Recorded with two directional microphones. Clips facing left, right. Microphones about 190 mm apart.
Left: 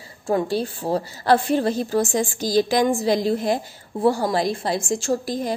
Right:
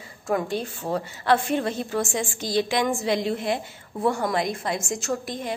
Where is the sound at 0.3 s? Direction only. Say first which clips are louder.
Left 4 dB; 35° left (ahead or behind).